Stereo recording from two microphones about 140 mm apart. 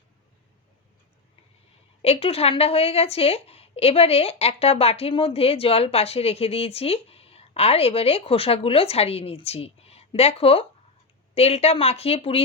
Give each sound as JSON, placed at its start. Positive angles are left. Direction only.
{"t": 2.0, "sound": "speech", "side_deg": 45}